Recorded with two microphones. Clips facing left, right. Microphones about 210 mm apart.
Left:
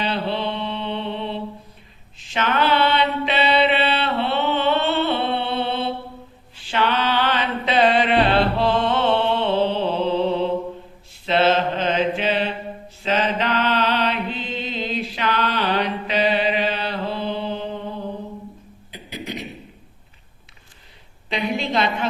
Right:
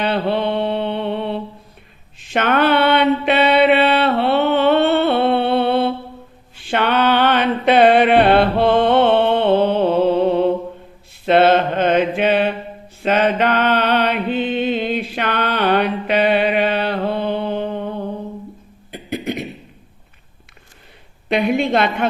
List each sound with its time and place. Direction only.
0.0 s mantra: 55° right (ahead or behind)
6.6 s music: 55° right (ahead or behind)
11.3 s mantra: 55° right (ahead or behind)
18.9 s a sound: 55° right (ahead or behind)
21.2 s a woman's voice: 55° right (ahead or behind)